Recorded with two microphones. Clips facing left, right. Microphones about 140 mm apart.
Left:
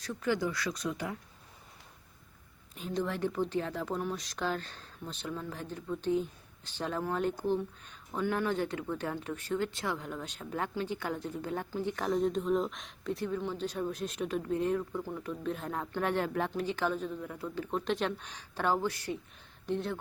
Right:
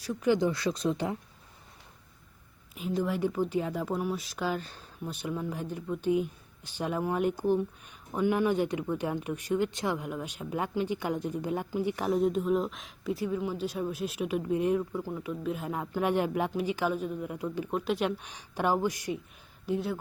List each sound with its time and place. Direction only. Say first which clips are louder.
0.0 s speech: right 5 dB; 15° right (ahead or behind)
2.7 s speech: right 4 dB; 5° right (ahead or behind)